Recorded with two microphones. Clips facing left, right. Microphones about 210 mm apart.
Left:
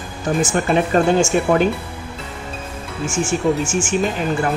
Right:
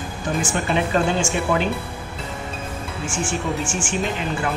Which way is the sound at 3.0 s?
40° left (ahead or behind).